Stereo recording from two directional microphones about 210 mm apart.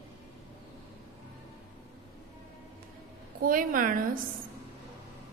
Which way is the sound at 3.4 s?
40° right (ahead or behind).